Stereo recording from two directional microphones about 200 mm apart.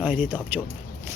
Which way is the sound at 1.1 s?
15° right (ahead or behind).